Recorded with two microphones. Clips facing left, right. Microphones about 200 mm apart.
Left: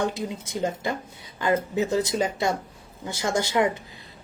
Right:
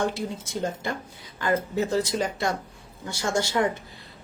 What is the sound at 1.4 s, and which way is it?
Speech, 20° left (ahead or behind).